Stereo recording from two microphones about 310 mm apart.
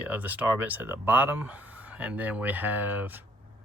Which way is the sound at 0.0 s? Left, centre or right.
Centre.